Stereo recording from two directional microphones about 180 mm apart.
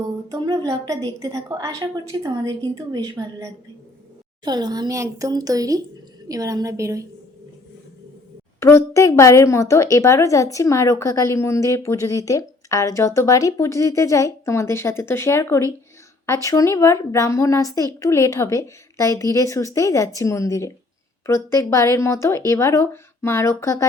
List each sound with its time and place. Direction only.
0.3 s a woman's voice: 20° right (ahead or behind)
8.6 s a woman's voice: 15° left (ahead or behind)